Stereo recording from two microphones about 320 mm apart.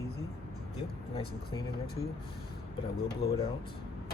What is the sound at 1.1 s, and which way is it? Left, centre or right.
Speech, centre.